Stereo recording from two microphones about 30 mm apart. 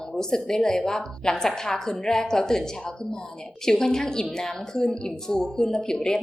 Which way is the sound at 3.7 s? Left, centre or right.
Centre.